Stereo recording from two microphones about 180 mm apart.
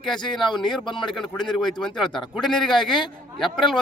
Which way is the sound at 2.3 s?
Centre (ahead or behind).